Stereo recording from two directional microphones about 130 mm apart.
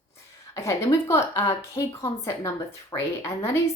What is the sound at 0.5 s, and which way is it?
Speech, 20° left (ahead or behind).